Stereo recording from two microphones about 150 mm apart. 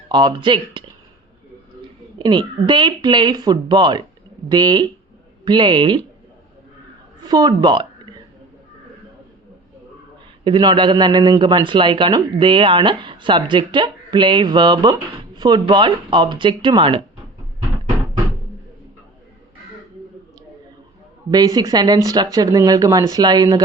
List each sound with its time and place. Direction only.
0.1 s a man's voice: 30° right (ahead or behind)
2.1 s a sound: 30° right (ahead or behind)
2.6 s a man's voice: 30° right (ahead or behind)
7.2 s speech: 25° right (ahead or behind)
10.4 s a man's voice: 30° right (ahead or behind)
21.2 s speech: 25° right (ahead or behind)